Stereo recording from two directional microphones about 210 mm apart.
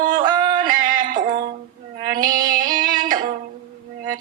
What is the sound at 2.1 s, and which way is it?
Female singing, 20° right (ahead or behind).